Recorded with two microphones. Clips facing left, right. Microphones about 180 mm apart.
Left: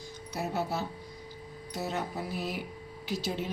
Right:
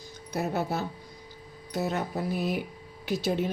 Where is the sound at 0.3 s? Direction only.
50° right (ahead or behind).